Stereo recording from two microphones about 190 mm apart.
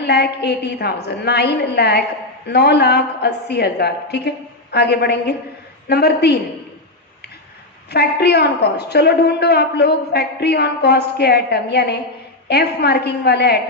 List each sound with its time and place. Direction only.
0.0 s a woman's voice: 60° left (ahead or behind)
7.9 s a woman's voice: 60° left (ahead or behind)